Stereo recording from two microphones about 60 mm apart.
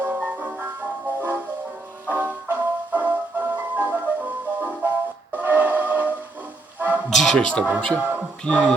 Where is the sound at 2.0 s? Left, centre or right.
Right.